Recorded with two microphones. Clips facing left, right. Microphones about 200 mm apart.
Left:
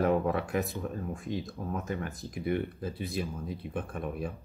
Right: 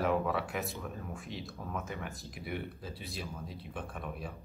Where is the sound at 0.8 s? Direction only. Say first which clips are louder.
Left 6 dB; 35° left (ahead or behind).